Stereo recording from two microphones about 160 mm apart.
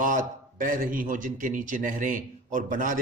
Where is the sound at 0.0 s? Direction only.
55° right (ahead or behind).